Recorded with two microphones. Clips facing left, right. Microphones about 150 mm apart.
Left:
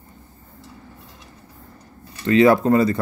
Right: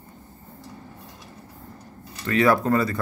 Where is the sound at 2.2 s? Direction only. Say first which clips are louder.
Left 5 dB; 25° left (ahead or behind).